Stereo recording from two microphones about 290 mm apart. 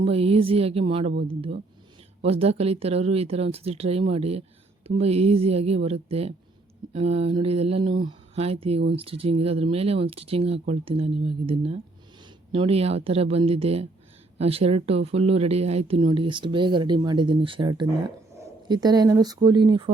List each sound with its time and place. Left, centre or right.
0.0 s speech: centre
2.2 s speech: right